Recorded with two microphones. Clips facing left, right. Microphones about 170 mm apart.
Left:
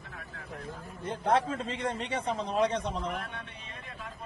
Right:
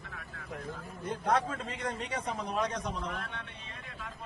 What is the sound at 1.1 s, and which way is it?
A man's voice, 30° left (ahead or behind).